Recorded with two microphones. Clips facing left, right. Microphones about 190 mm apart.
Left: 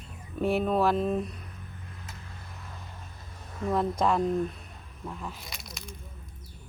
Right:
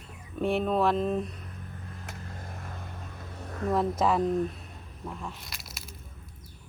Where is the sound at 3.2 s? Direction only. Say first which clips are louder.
Right 6 dB; 65° right (ahead or behind).